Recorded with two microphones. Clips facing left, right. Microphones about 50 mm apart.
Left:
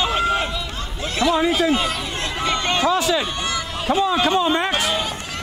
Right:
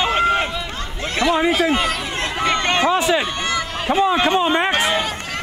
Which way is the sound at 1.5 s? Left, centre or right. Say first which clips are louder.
Right 1 dB; right.